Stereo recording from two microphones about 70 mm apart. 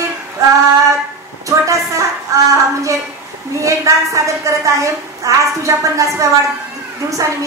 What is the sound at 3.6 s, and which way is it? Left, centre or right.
A woman's voice, right.